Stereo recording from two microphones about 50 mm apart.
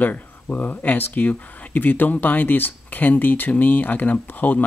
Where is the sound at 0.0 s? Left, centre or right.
Left.